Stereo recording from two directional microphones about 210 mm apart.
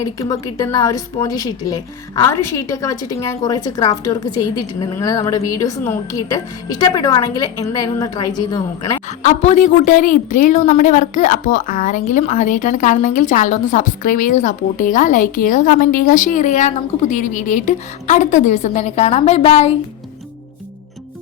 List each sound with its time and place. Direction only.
0.0 s a woman's voice: 15° left (ahead or behind)
9.2 s a woman's voice: 35° left (ahead or behind)